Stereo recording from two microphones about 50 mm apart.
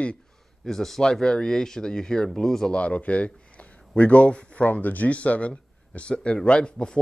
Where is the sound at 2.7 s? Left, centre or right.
Left.